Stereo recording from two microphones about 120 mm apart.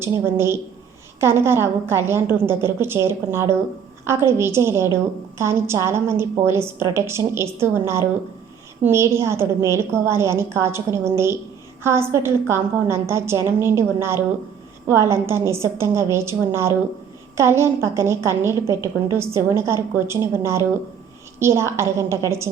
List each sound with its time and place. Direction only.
0.0 s a woman's voice: 20° right (ahead or behind)